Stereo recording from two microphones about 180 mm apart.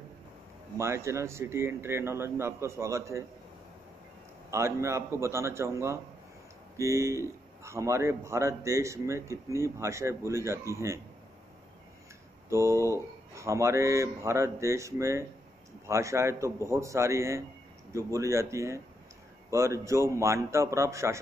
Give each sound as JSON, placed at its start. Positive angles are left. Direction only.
{"t": 0.7, "sound": "a man's voice", "side_deg": -15}
{"t": 4.5, "sound": "a man's voice", "side_deg": -15}
{"t": 12.4, "sound": "a man's voice", "side_deg": -15}